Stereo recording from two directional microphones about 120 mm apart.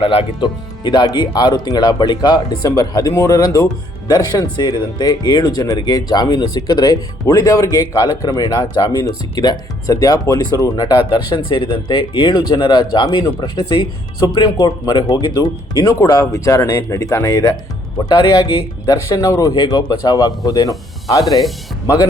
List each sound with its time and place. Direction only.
0.0 s speech: 50° left (ahead or behind); by 7.0 s 35° left (ahead or behind)
7.3 s speech: 25° left (ahead or behind)